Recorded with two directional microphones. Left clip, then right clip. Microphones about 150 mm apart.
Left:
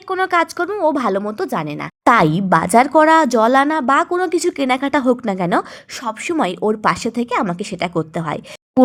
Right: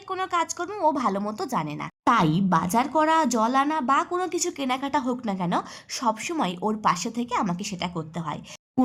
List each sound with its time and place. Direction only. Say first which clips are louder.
0.3 s a woman's voice: left 9 dB; 35° left (ahead or behind)
0.7 s a woman's voice: left 7 dB; 20° left (ahead or behind)
7.9 s a woman's voice: left 11 dB; 40° left (ahead or behind)